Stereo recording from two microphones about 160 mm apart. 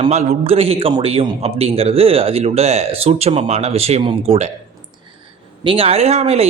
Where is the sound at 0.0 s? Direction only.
45° right (ahead or behind).